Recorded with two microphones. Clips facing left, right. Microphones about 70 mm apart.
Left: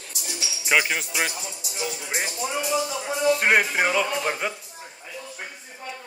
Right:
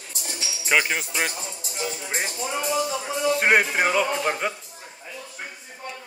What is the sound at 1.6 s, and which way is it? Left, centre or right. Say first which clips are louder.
Speech: right 1 dB; right.